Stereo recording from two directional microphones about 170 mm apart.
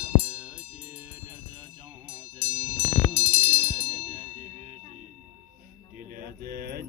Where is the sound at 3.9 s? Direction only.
40° right (ahead or behind).